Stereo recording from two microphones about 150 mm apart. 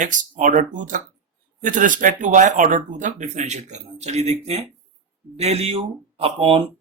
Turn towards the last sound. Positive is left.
turn(degrees=-35)  # may be behind; listen again after turning